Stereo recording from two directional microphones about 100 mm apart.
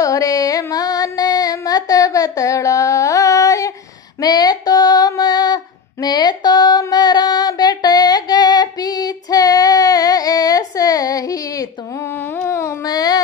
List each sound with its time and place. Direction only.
0.0 s female singing: 35° left (ahead or behind)
12.1 s carnatic music: 25° left (ahead or behind)
12.8 s a sound: 40° left (ahead or behind)